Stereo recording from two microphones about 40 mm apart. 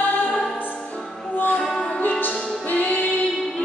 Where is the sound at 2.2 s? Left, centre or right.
Left.